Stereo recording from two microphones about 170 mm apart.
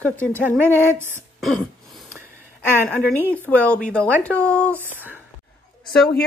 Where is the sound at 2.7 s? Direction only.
10° left (ahead or behind).